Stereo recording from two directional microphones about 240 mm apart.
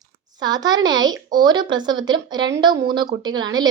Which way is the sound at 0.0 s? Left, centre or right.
Centre.